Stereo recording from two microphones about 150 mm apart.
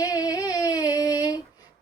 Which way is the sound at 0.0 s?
25° left (ahead or behind).